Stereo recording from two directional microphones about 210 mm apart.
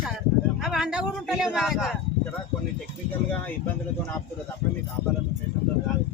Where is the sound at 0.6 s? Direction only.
Centre (ahead or behind).